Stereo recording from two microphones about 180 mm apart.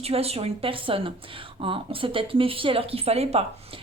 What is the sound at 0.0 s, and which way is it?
Speech, 35° right (ahead or behind).